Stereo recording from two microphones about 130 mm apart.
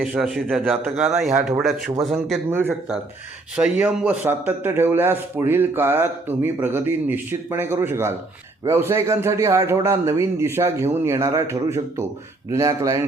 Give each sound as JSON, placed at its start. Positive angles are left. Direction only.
{"t": 0.0, "sound": "a man's voice", "side_deg": -5}
{"t": 1.3, "sound": "a man's voice", "side_deg": -15}
{"t": 2.0, "sound": "a man's voice", "side_deg": 0}
{"t": 2.5, "sound": "a man's voice", "side_deg": -15}